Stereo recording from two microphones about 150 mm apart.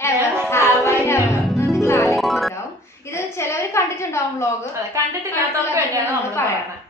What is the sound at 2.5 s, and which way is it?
A woman's voice, 20° left (ahead or behind).